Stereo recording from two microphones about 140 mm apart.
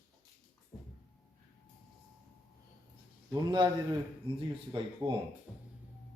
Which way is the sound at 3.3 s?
30° right (ahead or behind).